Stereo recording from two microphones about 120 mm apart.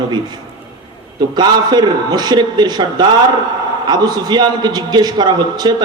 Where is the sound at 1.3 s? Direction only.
35° right (ahead or behind).